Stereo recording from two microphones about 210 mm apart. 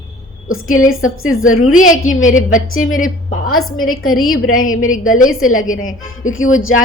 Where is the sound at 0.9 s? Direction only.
75° left (ahead or behind).